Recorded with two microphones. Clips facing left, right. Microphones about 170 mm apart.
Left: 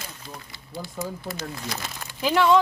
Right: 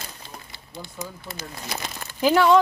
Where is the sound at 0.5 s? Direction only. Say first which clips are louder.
Left 4 dB; 20° right (ahead or behind).